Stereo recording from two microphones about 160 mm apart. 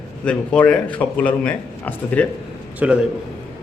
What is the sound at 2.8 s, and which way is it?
Speech, 10° right (ahead or behind).